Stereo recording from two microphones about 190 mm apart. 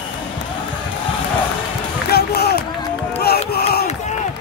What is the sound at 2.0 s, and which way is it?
Run, 55° left (ahead or behind).